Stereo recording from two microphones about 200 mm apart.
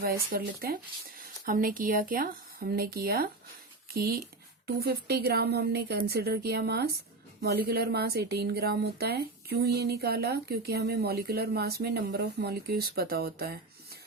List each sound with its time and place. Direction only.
0.0 s a woman's voice: 45° right (ahead or behind)